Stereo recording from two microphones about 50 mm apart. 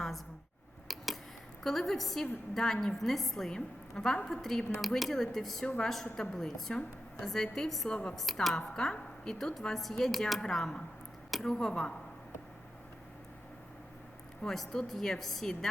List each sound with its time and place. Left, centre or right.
0.9 s a sound: centre
1.6 s a woman's voice: centre
5.6 s a woman's voice: centre
5.9 s a woman's voice: centre
7.9 s a woman's voice: centre
8.1 s a woman's voice: centre
10.4 s a woman's voice: centre
11.3 s a sound: centre
11.5 s a woman's voice: centre
14.4 s speech: centre